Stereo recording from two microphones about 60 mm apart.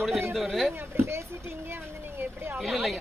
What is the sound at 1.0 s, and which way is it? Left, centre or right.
Speech, right.